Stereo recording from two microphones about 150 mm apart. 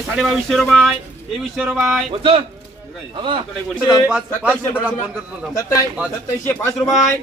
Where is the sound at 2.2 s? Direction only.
35° right (ahead or behind).